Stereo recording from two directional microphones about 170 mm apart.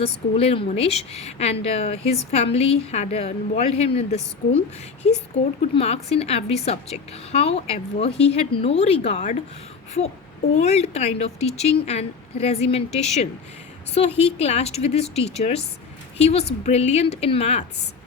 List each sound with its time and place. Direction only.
0.0 s a woman's voice: 35° left (ahead or behind)
5.7 s a woman's voice: 35° left (ahead or behind)
10.6 s a woman's voice: 40° left (ahead or behind)